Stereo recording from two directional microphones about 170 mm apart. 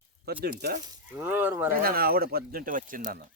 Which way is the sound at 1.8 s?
60° right (ahead or behind).